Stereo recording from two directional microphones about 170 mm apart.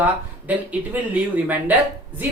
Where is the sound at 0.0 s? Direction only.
10° right (ahead or behind).